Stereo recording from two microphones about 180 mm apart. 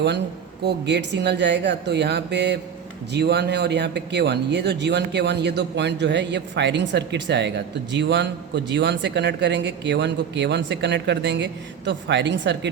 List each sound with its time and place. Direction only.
0.6 s a man's voice: 75° right (ahead or behind)